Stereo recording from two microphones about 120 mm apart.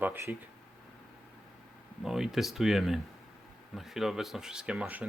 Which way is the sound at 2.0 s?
5° right (ahead or behind).